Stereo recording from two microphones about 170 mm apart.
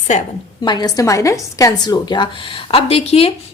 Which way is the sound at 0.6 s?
25° left (ahead or behind).